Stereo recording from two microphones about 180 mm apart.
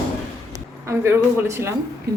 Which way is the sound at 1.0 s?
15° right (ahead or behind).